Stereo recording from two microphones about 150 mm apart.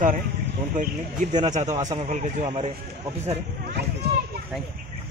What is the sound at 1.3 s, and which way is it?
Speech, 50° right (ahead or behind).